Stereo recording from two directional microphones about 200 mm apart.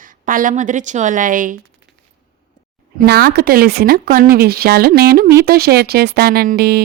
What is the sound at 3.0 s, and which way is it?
A woman's voice, 50° right (ahead or behind).